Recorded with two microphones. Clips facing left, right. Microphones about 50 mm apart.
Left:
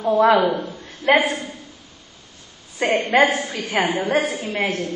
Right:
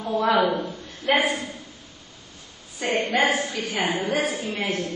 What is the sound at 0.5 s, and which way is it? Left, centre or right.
Speech, centre.